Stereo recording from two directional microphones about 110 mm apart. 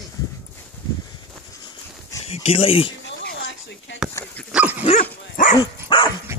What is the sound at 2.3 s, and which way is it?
Speech, 65° left (ahead or behind).